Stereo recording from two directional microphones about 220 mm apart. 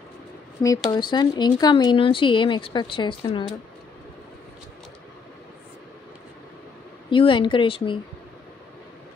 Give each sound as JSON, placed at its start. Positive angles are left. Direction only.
{"t": 0.8, "sound": "speech", "side_deg": 20}
{"t": 7.1, "sound": "speech", "side_deg": 20}